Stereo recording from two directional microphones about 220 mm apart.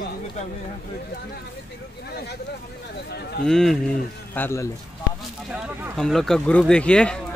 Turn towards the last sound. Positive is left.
turn(degrees=5)  # may be behind; listen again after turning